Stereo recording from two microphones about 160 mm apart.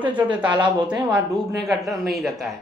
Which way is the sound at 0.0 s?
10° right (ahead or behind).